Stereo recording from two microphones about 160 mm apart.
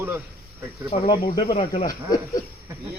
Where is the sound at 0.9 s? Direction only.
45° left (ahead or behind).